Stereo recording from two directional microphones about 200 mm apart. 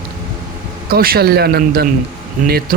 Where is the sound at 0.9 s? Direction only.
50° right (ahead or behind).